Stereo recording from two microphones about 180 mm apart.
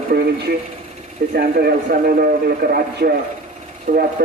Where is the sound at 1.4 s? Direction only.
55° right (ahead or behind).